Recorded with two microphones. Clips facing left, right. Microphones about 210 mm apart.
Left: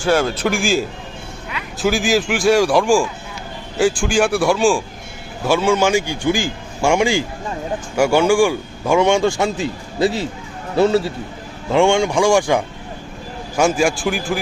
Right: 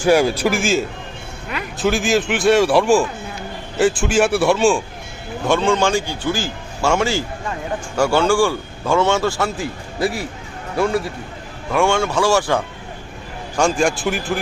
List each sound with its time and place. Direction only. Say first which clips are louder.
0.0 s a man's voice: right 2 dB; 10° right (ahead or behind)